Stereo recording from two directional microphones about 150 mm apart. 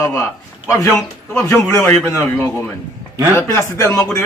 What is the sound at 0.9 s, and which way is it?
A man's voice, 20° left (ahead or behind).